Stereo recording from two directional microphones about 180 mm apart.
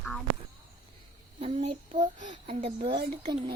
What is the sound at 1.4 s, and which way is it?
A child's voice, 35° right (ahead or behind).